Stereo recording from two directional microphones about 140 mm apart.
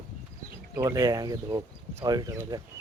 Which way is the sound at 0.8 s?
25° right (ahead or behind).